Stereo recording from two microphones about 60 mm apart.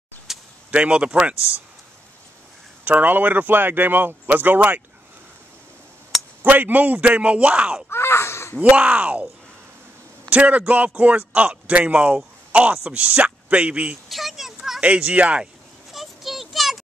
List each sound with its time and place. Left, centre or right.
0.3 s a sound: centre
0.7 s speech: right
2.8 s speech: right
6.4 s speech: right
7.9 s caw: left
8.5 s speech: right
10.3 s speech: right
14.0 s a sound: centre
14.8 s speech: right
15.9 s a sound: centre